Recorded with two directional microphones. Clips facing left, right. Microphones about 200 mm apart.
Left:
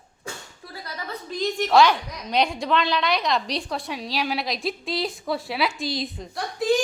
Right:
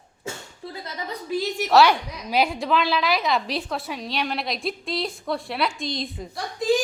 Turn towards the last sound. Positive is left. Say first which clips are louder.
# even
turn(degrees=0)  # may be behind; listen again after turning